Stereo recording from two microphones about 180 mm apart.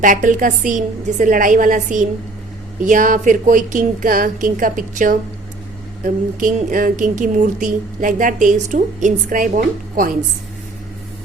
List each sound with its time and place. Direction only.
0.0 s speech: 45° right (ahead or behind)